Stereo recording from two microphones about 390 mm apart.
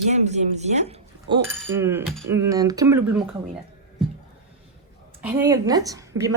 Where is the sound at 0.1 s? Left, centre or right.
Centre.